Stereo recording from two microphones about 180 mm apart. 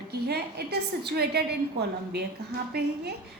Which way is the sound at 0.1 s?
65° right (ahead or behind).